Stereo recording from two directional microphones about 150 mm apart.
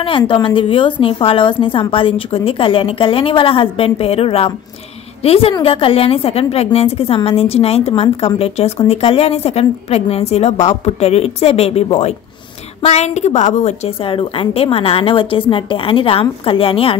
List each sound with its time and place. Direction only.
0.2 s a woman's voice: 30° left (ahead or behind)
12.8 s a woman's voice: 50° left (ahead or behind)